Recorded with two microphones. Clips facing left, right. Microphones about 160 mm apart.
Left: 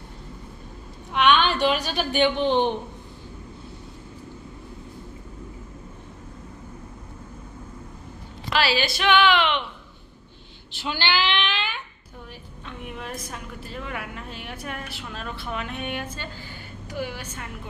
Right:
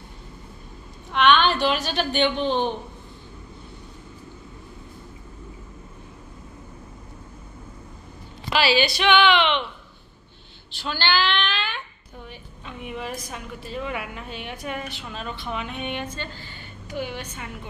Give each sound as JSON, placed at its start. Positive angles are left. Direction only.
{"t": 1.1, "sound": "a sound", "side_deg": 5}
{"t": 1.6, "sound": "a woman's voice", "side_deg": 10}
{"t": 8.5, "sound": "a woman's voice", "side_deg": 0}
{"t": 10.9, "sound": "child singing", "side_deg": 15}
{"t": 12.6, "sound": "a woman's voice", "side_deg": -5}